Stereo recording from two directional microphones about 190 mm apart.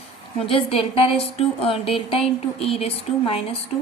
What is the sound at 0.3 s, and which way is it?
A woman's voice, 30° left (ahead or behind).